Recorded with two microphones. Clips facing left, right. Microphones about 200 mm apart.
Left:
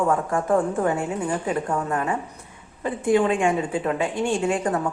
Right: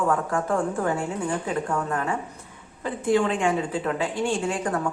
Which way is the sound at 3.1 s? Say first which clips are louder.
Left 2 dB; 20° left (ahead or behind).